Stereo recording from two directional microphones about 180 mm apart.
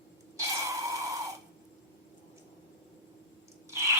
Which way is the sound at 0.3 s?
20° right (ahead or behind).